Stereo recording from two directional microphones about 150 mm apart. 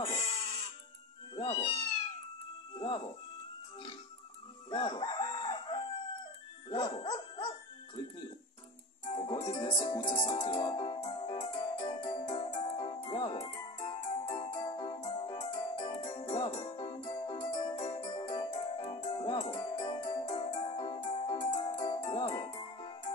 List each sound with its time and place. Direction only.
0.0 s goat: 40° left (ahead or behind)
1.3 s cat: 35° left (ahead or behind)
4.6 s crowing: 35° left (ahead or behind)
6.7 s dog: 35° left (ahead or behind)
9.0 s music: 40° left (ahead or behind)